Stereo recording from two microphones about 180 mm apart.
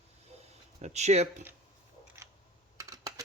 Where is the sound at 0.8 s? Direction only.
40° right (ahead or behind).